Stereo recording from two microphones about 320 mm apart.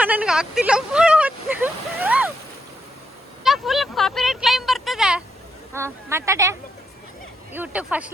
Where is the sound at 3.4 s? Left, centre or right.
Centre.